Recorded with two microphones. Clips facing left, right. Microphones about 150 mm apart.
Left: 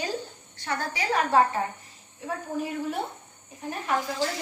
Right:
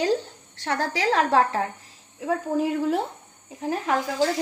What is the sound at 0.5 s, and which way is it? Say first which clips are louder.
A woman's voice: right 5 dB; 90° right.